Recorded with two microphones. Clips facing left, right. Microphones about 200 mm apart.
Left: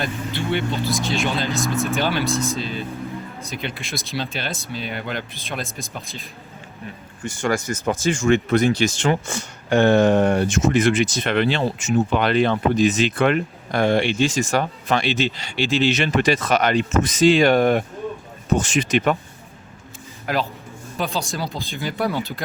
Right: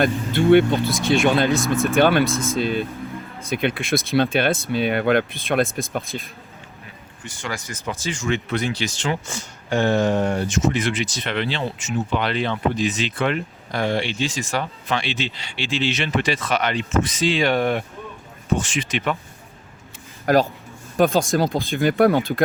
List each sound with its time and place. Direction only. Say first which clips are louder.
0.0 s speech: right 7 dB; 50° right (ahead or behind)
1.6 s speech: right 2 dB; centre (ahead or behind)
2.0 s speech: right 5 dB; 55° right (ahead or behind)
7.3 s speech: left 9 dB; 45° left (ahead or behind)
20.2 s speech: right 7 dB; 45° right (ahead or behind)